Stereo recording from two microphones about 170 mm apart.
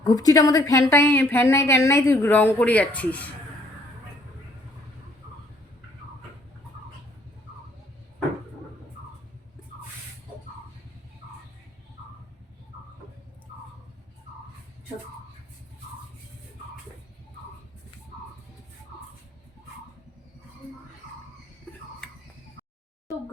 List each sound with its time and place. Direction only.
0.0 s a woman's voice: 20° left (ahead or behind)